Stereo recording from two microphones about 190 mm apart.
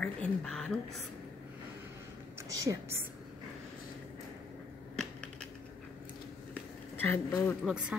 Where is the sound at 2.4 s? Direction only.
15° right (ahead or behind).